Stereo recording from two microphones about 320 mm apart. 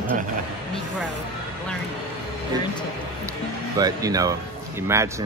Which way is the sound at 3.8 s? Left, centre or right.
Centre.